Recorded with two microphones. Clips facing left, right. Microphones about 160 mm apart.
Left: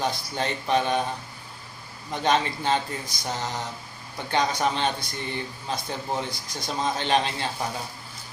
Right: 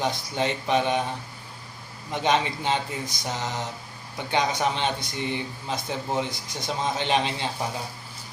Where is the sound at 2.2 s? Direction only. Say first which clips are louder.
Even; 20° right (ahead or behind).